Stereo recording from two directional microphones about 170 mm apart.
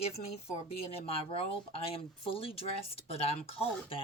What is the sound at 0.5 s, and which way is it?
Speech, 35° left (ahead or behind).